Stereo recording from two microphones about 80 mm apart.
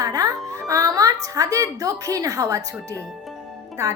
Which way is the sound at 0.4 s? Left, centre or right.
Right.